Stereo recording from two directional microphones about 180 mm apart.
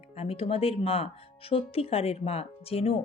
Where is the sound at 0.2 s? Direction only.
30° left (ahead or behind).